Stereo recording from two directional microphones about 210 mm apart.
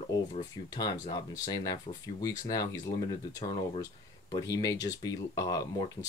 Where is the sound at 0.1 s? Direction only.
20° left (ahead or behind).